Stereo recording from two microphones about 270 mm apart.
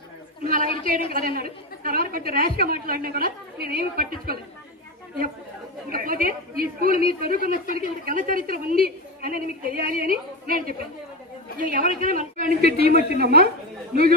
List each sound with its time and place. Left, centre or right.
0.4 s chatter: right
1.1 s a woman's voice: right
5.9 s a woman's voice: right